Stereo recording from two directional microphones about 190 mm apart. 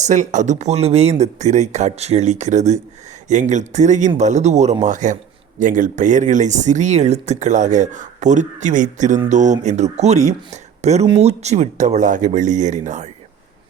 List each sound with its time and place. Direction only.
0.0 s speech: 40° right (ahead or behind)